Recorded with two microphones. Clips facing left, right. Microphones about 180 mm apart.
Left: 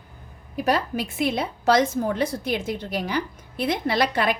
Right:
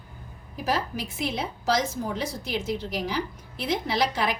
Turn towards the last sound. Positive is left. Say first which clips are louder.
# left 4 dB
turn(degrees=60)  # may be behind; listen again after turning